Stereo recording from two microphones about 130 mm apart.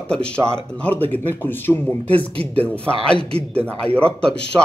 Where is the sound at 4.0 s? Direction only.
10° left (ahead or behind).